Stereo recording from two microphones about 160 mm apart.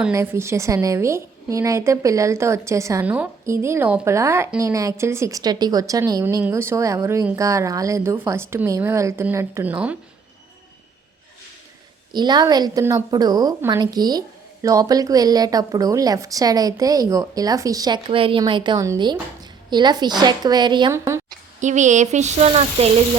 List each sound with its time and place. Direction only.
0.1 s a woman's voice: 15° right (ahead or behind)
12.1 s a woman's voice: 25° right (ahead or behind)
20.9 s a woman's voice: 15° right (ahead or behind)
21.6 s speech: 50° right (ahead or behind)